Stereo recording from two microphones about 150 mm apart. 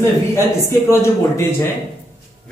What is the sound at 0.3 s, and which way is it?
A man's voice, 15° left (ahead or behind).